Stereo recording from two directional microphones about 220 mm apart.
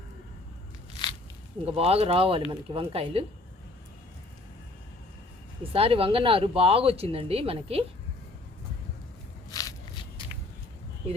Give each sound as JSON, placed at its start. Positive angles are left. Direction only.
{"t": 1.6, "sound": "speech", "side_deg": -25}
{"t": 5.7, "sound": "speech", "side_deg": -25}
{"t": 9.5, "sound": "a sound", "side_deg": 15}